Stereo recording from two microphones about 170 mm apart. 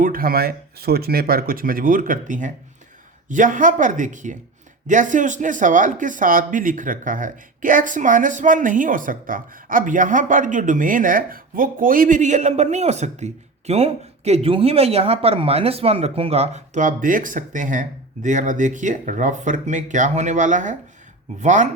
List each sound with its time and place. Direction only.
0.0 s speech: 60° right (ahead or behind)